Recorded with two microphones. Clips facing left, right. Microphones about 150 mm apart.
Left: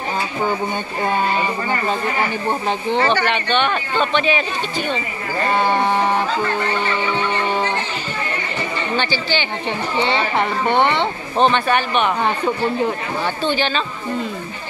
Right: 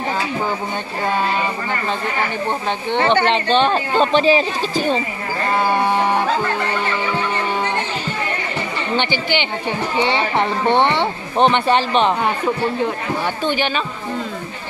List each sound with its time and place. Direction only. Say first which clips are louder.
3.1 s speech: right 3 dB; 25° right (ahead or behind)
5.7 s a sound: even; 10° right (ahead or behind)
8.9 s speech: right 2 dB; 20° right (ahead or behind)